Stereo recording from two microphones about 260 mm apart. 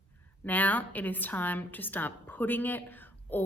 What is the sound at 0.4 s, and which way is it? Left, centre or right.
Speech, centre.